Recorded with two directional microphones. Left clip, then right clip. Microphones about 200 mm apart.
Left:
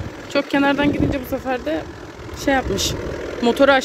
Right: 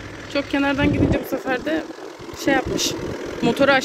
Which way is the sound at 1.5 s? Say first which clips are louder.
Even; centre (ahead or behind).